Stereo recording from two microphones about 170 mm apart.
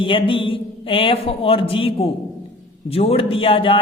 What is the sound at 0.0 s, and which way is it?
A man's voice, 30° left (ahead or behind).